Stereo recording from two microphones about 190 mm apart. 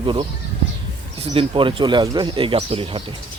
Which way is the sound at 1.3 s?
25° right (ahead or behind).